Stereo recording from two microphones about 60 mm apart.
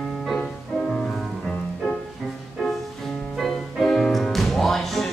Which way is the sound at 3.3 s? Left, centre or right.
Centre.